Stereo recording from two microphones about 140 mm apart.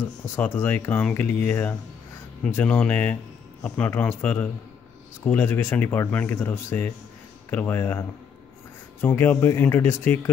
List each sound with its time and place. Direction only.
0.4 s speech: 15° left (ahead or behind)
9.0 s speech: 15° left (ahead or behind)